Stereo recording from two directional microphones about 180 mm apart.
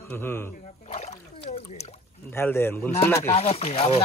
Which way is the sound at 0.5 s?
40° left (ahead or behind).